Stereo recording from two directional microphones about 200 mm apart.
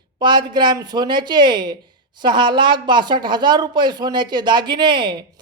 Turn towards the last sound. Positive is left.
turn(degrees=-25)  # may be behind; listen again after turning